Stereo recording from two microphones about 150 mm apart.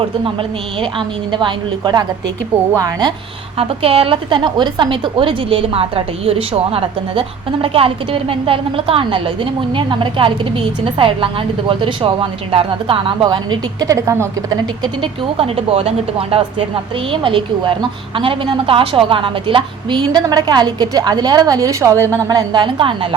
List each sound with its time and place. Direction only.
0.8 s a woman's voice: 35° right (ahead or behind)
3.6 s a woman's voice: 40° right (ahead or behind); by 14.6 s 20° right (ahead or behind)
15.0 s a woman's voice: 40° right (ahead or behind)